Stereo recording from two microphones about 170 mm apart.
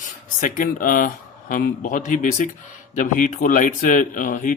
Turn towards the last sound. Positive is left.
turn(degrees=50)  # may be behind; listen again after turning